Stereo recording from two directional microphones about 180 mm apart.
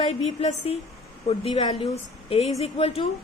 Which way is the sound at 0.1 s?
35° left (ahead or behind).